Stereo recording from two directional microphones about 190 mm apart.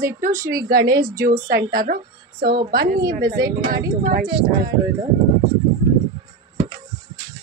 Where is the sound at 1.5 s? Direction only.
50° right (ahead or behind).